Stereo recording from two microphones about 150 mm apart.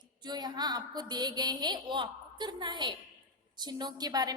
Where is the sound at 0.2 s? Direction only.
30° right (ahead or behind).